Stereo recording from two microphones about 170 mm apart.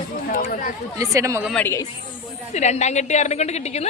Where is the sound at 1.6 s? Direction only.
15° left (ahead or behind).